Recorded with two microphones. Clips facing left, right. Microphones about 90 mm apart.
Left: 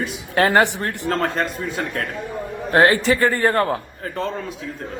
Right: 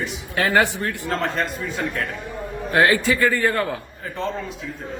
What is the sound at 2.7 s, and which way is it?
A man's voice, 35° left (ahead or behind).